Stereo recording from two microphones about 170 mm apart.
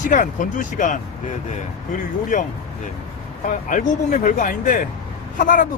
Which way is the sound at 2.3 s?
50° left (ahead or behind).